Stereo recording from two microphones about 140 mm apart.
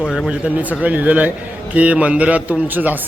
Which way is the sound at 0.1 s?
5° right (ahead or behind).